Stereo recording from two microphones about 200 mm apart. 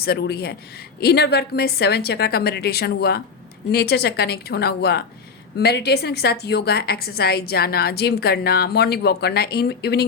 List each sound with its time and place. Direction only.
0.0 s a woman's voice: 55° left (ahead or behind)